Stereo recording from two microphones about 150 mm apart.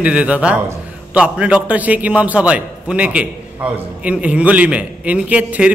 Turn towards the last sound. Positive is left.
turn(degrees=-10)  # may be behind; listen again after turning